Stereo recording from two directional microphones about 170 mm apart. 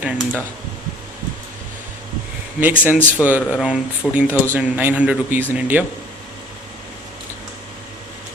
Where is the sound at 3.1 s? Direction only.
10° right (ahead or behind).